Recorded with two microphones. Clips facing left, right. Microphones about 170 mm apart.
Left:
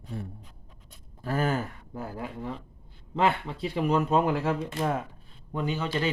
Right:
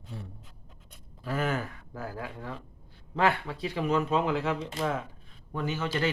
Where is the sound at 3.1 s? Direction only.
25° left (ahead or behind).